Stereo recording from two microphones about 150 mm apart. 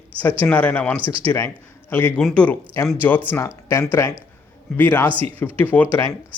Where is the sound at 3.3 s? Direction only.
20° left (ahead or behind).